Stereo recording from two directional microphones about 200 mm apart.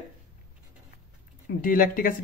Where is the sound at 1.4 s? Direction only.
45° left (ahead or behind).